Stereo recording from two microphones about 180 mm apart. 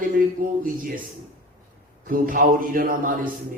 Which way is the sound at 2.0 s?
50° right (ahead or behind).